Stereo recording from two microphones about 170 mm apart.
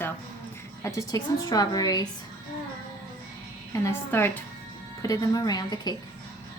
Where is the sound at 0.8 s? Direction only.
20° left (ahead or behind).